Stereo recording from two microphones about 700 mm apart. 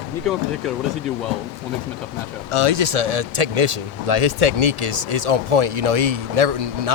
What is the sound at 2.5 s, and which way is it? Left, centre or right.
Speech, right.